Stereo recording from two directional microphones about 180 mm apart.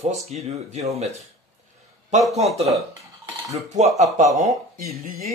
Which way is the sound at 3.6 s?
40° right (ahead or behind).